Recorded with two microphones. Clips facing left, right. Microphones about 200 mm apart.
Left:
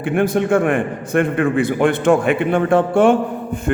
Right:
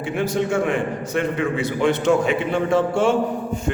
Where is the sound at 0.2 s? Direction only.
55° left (ahead or behind).